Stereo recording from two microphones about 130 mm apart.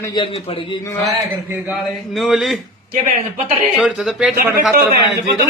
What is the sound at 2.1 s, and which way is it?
Speech, centre (ahead or behind).